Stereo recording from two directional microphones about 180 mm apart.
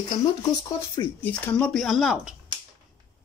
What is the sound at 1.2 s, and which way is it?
Speech, 10° left (ahead or behind).